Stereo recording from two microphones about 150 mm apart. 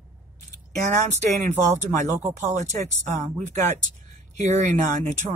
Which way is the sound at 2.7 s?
50° right (ahead or behind).